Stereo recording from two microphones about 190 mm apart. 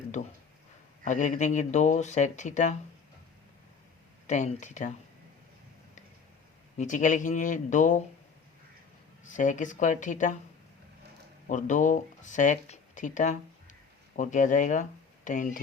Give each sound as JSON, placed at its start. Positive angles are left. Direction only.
{"t": 0.2, "sound": "speech", "side_deg": 40}
{"t": 4.3, "sound": "speech", "side_deg": 40}
{"t": 6.7, "sound": "speech", "side_deg": 40}
{"t": 9.2, "sound": "speech", "side_deg": 40}
{"t": 11.4, "sound": "speech", "side_deg": 40}